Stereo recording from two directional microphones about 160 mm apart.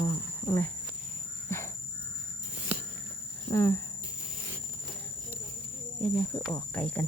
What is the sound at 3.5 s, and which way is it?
Speech, 15° left (ahead or behind).